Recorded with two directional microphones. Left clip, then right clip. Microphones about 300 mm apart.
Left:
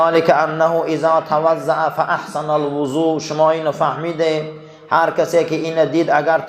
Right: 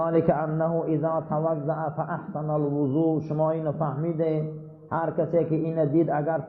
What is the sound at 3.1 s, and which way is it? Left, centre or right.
A man's voice, centre.